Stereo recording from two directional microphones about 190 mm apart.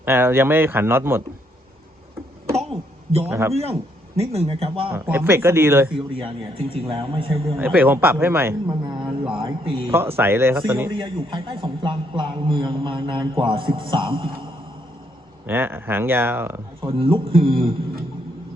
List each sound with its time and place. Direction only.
0.0 s speech: 10° right (ahead or behind)
3.2 s speech: 15° right (ahead or behind)
3.5 s speech: 35° right (ahead or behind)
4.9 s speech: 10° right (ahead or behind)
5.9 s a man's voice: 30° right (ahead or behind)
7.6 s speech: 10° right (ahead or behind); by 9.9 s 25° right (ahead or behind)
9.9 s speech: 10° right (ahead or behind)
10.9 s a man's voice: 25° right (ahead or behind)
15.4 s speech: 10° right (ahead or behind)
16.8 s a man's voice: 30° right (ahead or behind)